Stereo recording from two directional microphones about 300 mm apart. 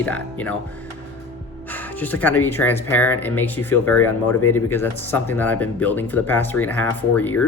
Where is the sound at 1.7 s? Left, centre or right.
Centre.